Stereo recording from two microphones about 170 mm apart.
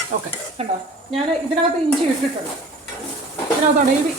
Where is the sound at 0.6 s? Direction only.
35° right (ahead or behind).